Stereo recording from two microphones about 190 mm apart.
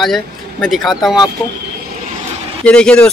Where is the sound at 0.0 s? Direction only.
Centre (ahead or behind).